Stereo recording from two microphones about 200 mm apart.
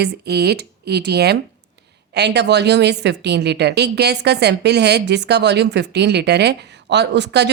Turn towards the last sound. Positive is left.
turn(degrees=-60)  # may be behind; listen again after turning